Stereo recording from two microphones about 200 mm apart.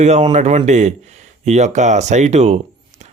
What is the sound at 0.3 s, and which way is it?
A man's voice, 35° right (ahead or behind).